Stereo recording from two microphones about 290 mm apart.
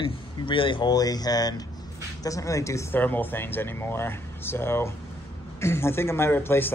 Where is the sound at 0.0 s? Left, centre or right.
Centre.